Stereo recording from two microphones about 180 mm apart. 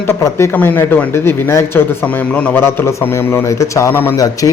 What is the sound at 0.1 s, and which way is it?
Speech, 15° left (ahead or behind).